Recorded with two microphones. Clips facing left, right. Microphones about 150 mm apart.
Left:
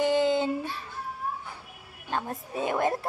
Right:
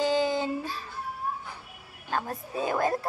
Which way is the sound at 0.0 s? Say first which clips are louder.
Left 2 dB; 20° left (ahead or behind).